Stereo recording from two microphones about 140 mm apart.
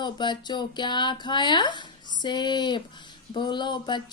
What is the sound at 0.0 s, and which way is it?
Speech, 35° left (ahead or behind).